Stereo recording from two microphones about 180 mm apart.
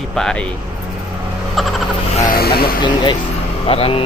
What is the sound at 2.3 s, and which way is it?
Vehicle, 55° left (ahead or behind).